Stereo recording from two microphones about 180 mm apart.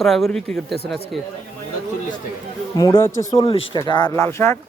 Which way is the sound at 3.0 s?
20° left (ahead or behind).